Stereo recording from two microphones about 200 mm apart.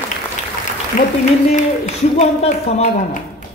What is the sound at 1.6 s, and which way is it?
A man's voice, 35° left (ahead or behind).